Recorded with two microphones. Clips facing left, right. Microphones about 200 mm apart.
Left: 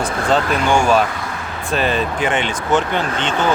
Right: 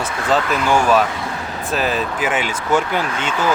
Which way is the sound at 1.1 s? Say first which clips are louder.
Right 1 dB; 30° right (ahead or behind).